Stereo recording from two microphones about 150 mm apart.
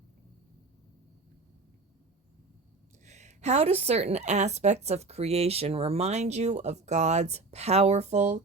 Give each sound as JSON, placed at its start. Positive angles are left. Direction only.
{"t": 3.0, "sound": "a woman's voice", "side_deg": -50}